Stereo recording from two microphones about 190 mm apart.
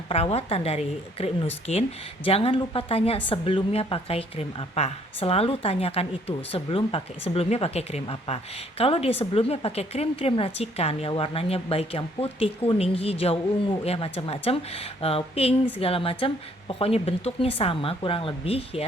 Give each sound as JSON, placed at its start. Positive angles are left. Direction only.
{"t": 0.1, "sound": "a woman's voice", "side_deg": 30}